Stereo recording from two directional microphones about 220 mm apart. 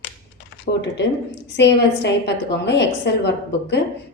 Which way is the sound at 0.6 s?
50° left (ahead or behind).